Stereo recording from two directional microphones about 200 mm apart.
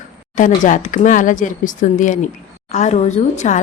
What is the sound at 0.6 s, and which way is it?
A woman's voice, 40° left (ahead or behind).